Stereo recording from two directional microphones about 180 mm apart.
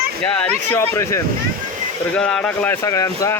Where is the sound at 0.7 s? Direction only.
15° left (ahead or behind).